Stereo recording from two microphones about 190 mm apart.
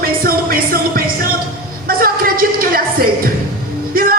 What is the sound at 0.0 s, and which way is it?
Music, 50° right (ahead or behind).